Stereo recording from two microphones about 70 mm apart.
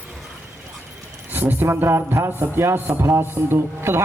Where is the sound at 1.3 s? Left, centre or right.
Right.